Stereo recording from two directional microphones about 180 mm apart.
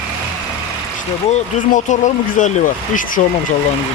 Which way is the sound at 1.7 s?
45° left (ahead or behind).